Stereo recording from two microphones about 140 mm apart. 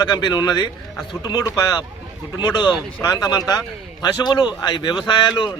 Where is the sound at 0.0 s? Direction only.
30° left (ahead or behind).